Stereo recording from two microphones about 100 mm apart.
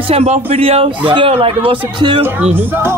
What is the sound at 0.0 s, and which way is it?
Speech, 85° right.